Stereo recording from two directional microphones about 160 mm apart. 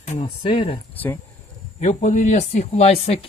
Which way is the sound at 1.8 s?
45° left (ahead or behind).